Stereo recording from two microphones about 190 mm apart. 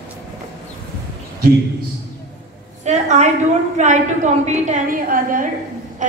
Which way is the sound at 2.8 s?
35° right (ahead or behind).